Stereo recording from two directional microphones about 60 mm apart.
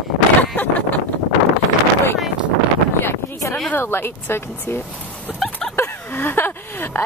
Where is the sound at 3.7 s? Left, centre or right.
Left.